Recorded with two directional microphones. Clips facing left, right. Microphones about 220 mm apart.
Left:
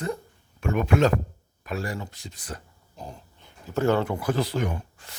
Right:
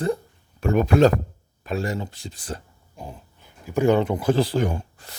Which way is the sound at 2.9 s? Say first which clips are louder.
Right 2 dB; 5° right (ahead or behind).